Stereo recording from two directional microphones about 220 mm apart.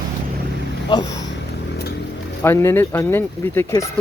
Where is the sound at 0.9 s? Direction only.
20° left (ahead or behind).